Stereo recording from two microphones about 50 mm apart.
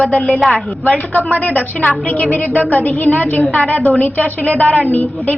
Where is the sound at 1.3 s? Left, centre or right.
Left.